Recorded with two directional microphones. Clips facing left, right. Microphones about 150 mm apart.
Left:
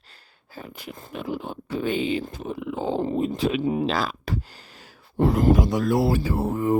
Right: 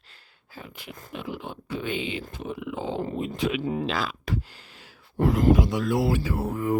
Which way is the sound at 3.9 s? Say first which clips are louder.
Left 3 dB; 40° left (ahead or behind).